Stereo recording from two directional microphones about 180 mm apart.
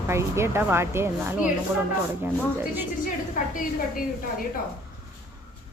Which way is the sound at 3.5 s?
50° left (ahead or behind).